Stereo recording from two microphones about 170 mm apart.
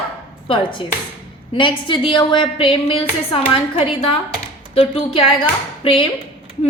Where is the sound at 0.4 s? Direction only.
30° left (ahead or behind).